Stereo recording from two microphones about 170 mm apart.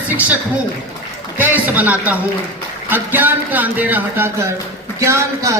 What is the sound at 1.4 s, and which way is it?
Speech, 10° right (ahead or behind).